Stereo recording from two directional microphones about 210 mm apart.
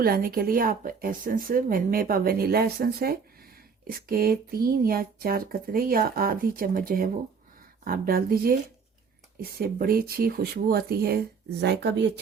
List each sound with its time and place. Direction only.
0.0 s speech: 45° right (ahead or behind)